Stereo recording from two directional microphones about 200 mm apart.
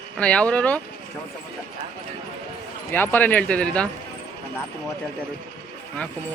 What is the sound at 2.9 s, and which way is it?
Speech, 10° left (ahead or behind).